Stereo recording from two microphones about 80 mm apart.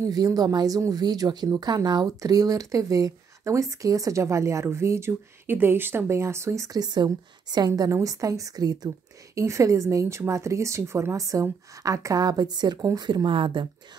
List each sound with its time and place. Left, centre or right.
0.1 s speech: right
1.0 s speech: right
9.4 s speech: right
13.1 s speech: right